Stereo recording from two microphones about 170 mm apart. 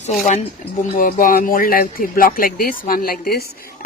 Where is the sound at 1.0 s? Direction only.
55° left (ahead or behind).